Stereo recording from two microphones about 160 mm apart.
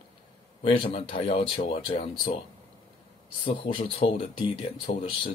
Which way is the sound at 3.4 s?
35° left (ahead or behind).